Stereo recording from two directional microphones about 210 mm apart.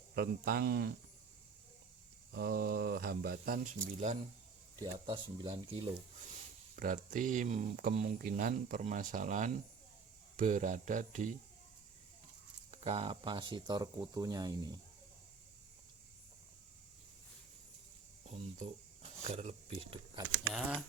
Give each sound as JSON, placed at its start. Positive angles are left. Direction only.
{"t": 0.2, "sound": "speech", "side_deg": -45}
{"t": 2.3, "sound": "speech", "side_deg": -45}
{"t": 4.8, "sound": "speech", "side_deg": -25}
{"t": 6.7, "sound": "speech", "side_deg": -40}
{"t": 12.7, "sound": "speech", "side_deg": -30}
{"t": 19.4, "sound": "speech", "side_deg": -30}
{"t": 20.5, "sound": "speech", "side_deg": 0}